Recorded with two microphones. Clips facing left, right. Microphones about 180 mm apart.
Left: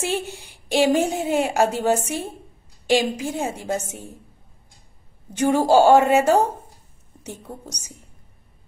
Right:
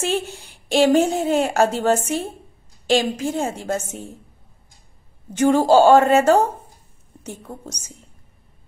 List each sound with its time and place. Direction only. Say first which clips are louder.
0.0 s a woman's voice: right 2 dB; 15° left (ahead or behind)
5.3 s a woman's voice: right 2 dB; 15° left (ahead or behind)